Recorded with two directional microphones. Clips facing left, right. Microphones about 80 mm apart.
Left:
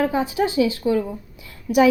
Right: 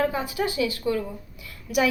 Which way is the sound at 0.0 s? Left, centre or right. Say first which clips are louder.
Left 5 dB; left.